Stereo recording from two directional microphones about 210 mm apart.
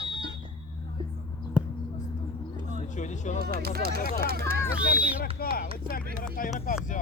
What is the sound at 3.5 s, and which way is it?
Speech, 45° right (ahead or behind).